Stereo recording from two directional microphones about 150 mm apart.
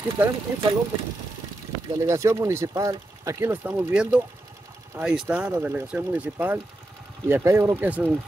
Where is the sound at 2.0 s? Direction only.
20° right (ahead or behind).